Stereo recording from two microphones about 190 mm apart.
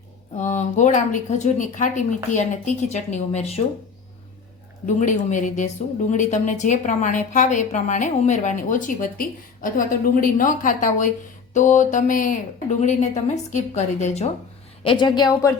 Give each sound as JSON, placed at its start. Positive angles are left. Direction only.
{"t": 0.3, "sound": "a woman's voice", "side_deg": 40}
{"t": 4.9, "sound": "a woman's voice", "side_deg": 40}
{"t": 14.8, "sound": "a woman's voice", "side_deg": 25}